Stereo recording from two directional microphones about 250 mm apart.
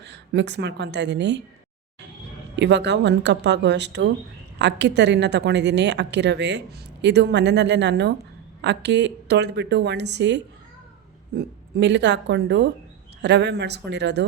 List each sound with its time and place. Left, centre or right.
0.0 s speech: right
2.6 s a woman's voice: right